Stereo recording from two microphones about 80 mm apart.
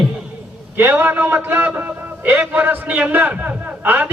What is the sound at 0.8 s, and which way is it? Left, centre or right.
A man's voice, right.